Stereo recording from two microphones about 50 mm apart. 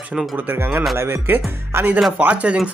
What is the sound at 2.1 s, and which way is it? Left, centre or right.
Speech, right.